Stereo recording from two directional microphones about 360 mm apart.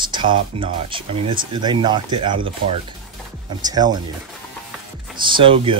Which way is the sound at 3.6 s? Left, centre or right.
Centre.